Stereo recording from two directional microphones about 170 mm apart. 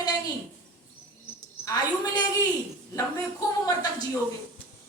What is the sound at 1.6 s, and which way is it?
Speech, 20° left (ahead or behind).